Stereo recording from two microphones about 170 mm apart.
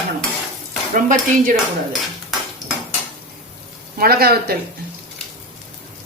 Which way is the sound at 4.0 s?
65° right (ahead or behind).